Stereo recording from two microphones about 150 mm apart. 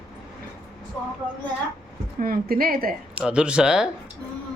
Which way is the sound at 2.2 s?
75° right (ahead or behind).